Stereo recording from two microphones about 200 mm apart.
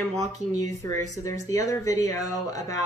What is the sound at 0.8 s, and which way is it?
Speech, 15° left (ahead or behind).